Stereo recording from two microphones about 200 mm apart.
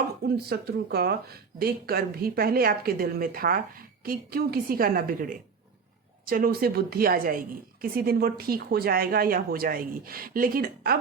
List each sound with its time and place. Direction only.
0.3 s speech: 50° right (ahead or behind)